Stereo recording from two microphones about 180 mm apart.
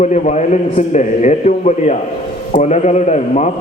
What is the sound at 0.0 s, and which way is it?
A man's voice, 40° left (ahead or behind).